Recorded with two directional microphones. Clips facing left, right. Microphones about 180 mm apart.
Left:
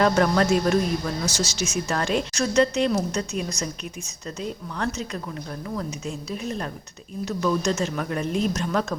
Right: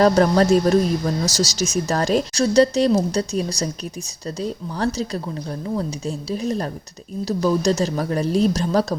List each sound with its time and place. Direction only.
0.0 s speech: 35° right (ahead or behind)